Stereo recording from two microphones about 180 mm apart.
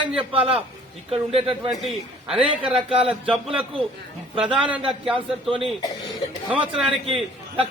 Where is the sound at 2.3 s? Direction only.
30° right (ahead or behind).